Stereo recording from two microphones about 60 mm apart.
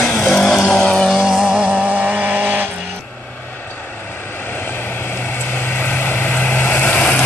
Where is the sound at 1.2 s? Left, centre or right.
Centre; by 2.6 s right.